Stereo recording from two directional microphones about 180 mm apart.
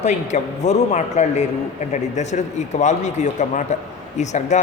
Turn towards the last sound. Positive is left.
turn(degrees=40)  # may be behind; listen again after turning